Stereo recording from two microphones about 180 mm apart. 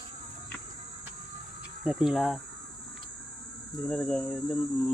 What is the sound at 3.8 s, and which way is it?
Speech, 5° left (ahead or behind).